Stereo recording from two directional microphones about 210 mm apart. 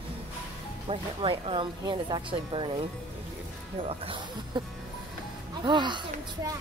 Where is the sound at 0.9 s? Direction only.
25° right (ahead or behind).